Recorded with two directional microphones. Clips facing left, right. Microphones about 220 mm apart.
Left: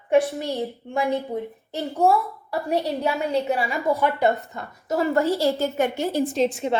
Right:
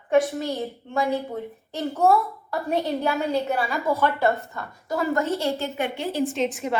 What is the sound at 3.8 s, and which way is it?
A woman's voice, 15° left (ahead or behind).